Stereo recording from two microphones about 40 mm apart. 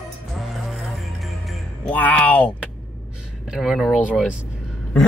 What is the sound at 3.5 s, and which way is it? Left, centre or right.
Speech, centre.